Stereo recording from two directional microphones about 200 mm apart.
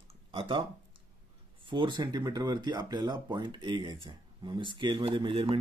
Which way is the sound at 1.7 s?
25° right (ahead or behind).